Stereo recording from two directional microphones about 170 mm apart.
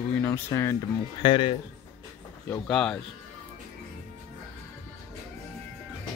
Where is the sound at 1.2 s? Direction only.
30° left (ahead or behind).